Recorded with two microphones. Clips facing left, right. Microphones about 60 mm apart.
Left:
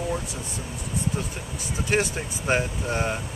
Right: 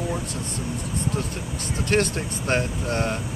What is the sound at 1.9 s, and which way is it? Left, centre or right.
Speech, centre.